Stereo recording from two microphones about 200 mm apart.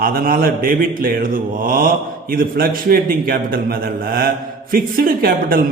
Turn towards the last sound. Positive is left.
turn(degrees=-45)  # may be behind; listen again after turning